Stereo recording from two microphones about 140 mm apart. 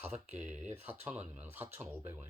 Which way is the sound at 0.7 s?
15° right (ahead or behind).